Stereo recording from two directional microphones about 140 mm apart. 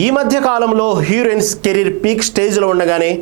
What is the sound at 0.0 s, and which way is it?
A man's voice, 20° right (ahead or behind).